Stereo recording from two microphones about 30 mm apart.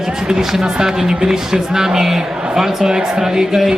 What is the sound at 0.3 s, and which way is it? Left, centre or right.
Speech, centre.